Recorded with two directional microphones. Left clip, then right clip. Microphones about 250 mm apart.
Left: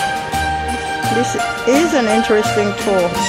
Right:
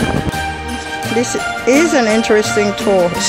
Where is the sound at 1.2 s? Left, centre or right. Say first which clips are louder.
Even; centre.